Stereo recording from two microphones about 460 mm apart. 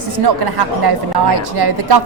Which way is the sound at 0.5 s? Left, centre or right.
Right.